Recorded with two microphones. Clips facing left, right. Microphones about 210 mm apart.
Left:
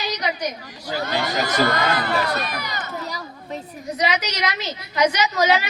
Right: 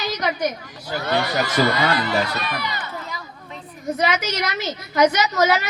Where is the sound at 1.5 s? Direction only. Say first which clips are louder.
Even; 50° left (ahead or behind).